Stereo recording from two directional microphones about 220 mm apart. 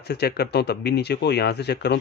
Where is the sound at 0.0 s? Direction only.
50° left (ahead or behind).